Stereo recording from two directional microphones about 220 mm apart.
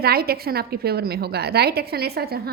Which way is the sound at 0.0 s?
45° right (ahead or behind).